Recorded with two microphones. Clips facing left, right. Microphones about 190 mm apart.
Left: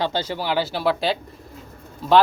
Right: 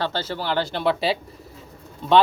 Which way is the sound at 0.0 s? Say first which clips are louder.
Left 2 dB; 15° left (ahead or behind).